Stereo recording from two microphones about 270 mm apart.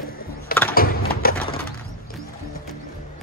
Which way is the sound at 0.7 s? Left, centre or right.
Left.